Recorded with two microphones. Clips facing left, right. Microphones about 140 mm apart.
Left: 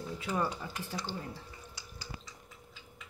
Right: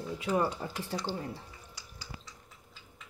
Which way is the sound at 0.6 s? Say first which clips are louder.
Right 3 dB; 35° right (ahead or behind).